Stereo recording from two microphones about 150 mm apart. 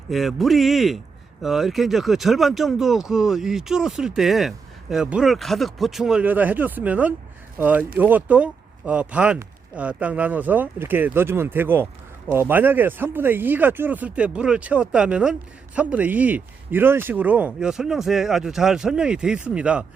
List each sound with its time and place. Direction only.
0.1 s speech: centre (ahead or behind)